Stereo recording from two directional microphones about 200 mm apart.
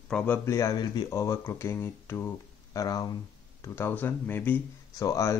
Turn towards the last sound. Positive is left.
turn(degrees=15)  # may be behind; listen again after turning